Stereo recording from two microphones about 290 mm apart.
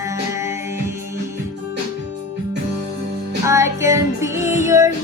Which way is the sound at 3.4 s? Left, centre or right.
Centre.